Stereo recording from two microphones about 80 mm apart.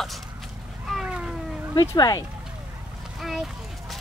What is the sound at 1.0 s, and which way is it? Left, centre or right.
Cat, centre.